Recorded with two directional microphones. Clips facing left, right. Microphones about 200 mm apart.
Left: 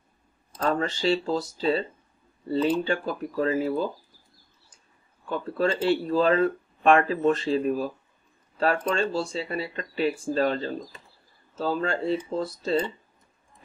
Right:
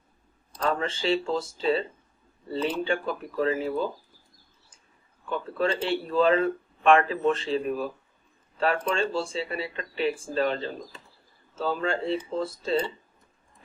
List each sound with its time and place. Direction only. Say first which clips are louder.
0.7 s speech: left 2 dB; 40° left (ahead or behind)
5.3 s speech: left 1 dB; 40° left (ahead or behind)